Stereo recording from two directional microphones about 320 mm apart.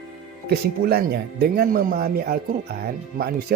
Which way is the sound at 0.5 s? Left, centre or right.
Right.